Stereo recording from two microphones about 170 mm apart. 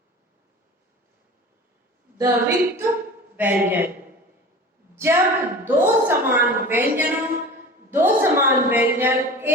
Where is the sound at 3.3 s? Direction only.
10° right (ahead or behind).